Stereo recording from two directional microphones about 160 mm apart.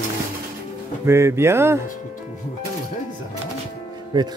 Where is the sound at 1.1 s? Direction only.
15° right (ahead or behind).